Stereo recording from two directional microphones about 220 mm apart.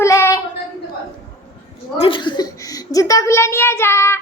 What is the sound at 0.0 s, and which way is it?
Child singing, 15° left (ahead or behind).